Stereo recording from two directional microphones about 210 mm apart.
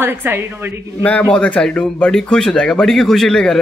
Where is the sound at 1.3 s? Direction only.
5° left (ahead or behind).